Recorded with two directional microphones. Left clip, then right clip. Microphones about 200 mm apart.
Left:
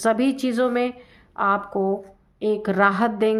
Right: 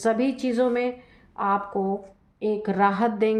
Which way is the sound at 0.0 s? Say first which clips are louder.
Left 3 dB; 35° left (ahead or behind).